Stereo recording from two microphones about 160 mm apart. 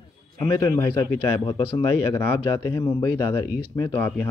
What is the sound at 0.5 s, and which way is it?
A man's voice, 20° left (ahead or behind).